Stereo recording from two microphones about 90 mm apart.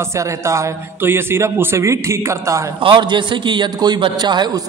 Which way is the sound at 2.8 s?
65° right (ahead or behind).